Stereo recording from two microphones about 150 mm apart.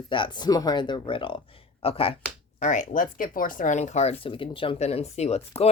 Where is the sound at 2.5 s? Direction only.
55° left (ahead or behind).